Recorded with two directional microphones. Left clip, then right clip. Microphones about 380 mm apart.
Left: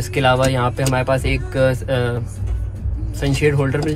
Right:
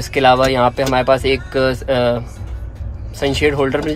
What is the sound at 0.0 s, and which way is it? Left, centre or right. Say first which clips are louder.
Speech: right 4 dB; right.